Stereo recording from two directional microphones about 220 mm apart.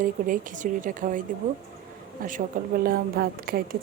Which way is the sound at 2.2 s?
40° right (ahead or behind).